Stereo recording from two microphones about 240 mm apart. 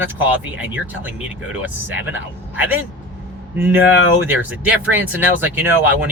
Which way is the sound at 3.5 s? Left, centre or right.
Centre.